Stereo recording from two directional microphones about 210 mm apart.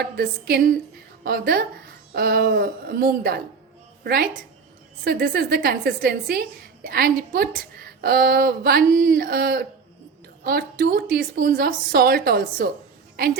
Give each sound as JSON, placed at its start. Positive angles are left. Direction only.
{"t": 0.0, "sound": "a woman's voice", "side_deg": -50}